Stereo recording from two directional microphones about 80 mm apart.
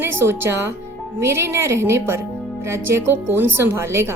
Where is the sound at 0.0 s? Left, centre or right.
Right.